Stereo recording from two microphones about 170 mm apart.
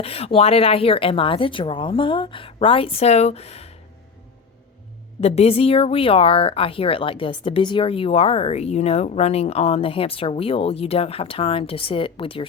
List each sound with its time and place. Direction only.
0.0 s speech: 35° left (ahead or behind)
5.2 s speech: 40° left (ahead or behind)